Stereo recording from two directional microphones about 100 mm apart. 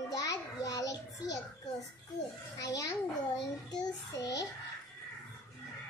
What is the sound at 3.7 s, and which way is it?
Child singing, 40° left (ahead or behind).